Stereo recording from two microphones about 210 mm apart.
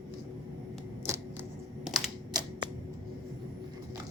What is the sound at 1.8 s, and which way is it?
Typewriter, centre (ahead or behind).